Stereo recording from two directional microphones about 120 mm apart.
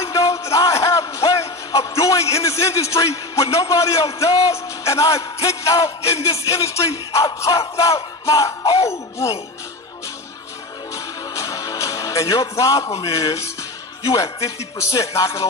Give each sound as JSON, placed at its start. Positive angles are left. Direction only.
{"t": 0.0, "sound": "music", "side_deg": 25}
{"t": 10.9, "sound": "music", "side_deg": 25}